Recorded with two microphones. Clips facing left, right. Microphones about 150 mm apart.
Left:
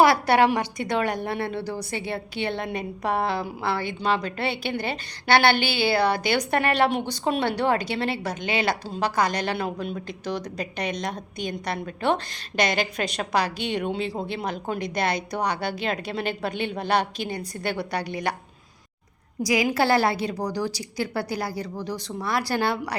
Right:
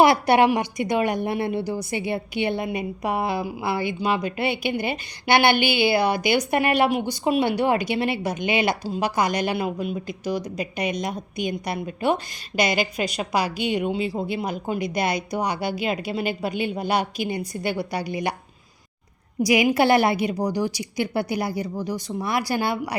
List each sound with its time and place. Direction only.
0.0 s a woman's voice: 20° right (ahead or behind)
19.4 s a woman's voice: 25° right (ahead or behind)